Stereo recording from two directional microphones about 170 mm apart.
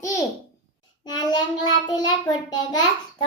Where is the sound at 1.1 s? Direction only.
25° left (ahead or behind).